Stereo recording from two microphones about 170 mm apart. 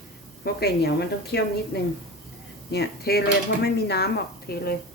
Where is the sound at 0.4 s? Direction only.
70° left (ahead or behind).